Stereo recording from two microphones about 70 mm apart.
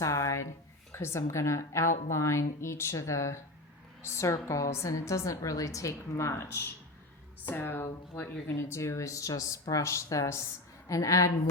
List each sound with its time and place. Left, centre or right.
0.0 s a sound: left
0.9 s a woman's voice: left
8.5 s a woman's voice: left